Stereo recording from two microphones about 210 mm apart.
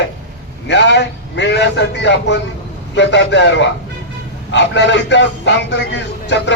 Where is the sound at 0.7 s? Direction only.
55° left (ahead or behind).